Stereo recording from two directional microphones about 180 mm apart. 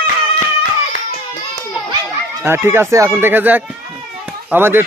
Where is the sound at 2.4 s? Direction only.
15° right (ahead or behind).